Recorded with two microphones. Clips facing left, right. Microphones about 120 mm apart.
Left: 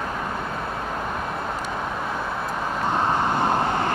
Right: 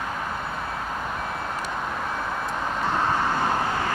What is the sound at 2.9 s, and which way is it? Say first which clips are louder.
Vehicle: left 2 dB; 20° left (ahead or behind).